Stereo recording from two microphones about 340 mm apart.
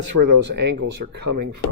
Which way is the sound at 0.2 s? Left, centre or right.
Right.